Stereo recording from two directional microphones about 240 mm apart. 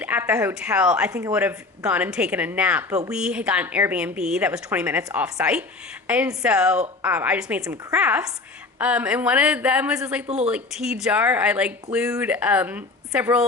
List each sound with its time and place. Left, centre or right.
0.0 s speech: centre
10.2 s speech: right
10.5 s speech: centre